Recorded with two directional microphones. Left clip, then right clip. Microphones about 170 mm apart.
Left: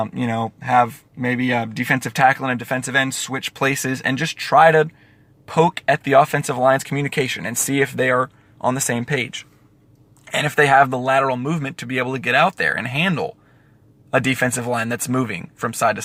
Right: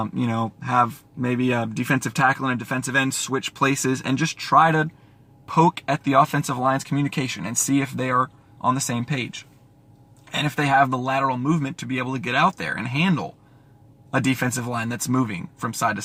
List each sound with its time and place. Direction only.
0.0 s speech: 15° left (ahead or behind)